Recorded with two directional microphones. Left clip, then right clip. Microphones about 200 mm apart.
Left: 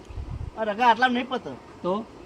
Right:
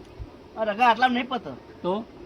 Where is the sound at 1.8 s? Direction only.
5° left (ahead or behind).